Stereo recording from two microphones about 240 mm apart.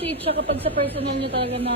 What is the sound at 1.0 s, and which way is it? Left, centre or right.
Speech, right.